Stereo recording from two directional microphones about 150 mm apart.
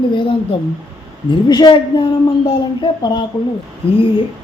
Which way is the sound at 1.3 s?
30° left (ahead or behind).